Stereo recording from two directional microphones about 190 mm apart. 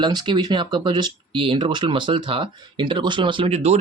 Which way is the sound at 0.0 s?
20° right (ahead or behind).